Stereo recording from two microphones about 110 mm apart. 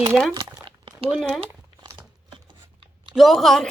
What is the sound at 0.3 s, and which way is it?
Crumpling, 45° right (ahead or behind).